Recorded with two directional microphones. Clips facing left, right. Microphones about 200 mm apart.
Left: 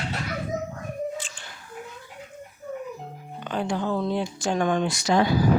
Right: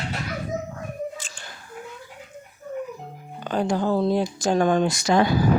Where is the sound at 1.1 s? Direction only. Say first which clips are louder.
Left 4 dB; 40° right (ahead or behind).